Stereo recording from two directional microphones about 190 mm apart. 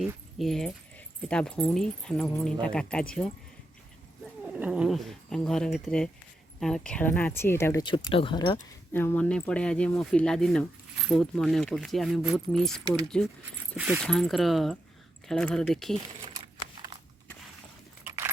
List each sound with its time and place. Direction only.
0.0 s speech: centre (ahead or behind)
4.4 s speech: 5° right (ahead or behind); by 8.5 s 25° left (ahead or behind)
8.9 s speech: 10° left (ahead or behind)
13.7 s speech: 10° right (ahead or behind)
14.0 s speech: 5° left (ahead or behind)
16.4 s a sound: 30° right (ahead or behind)
18.0 s keys jangling: 15° right (ahead or behind)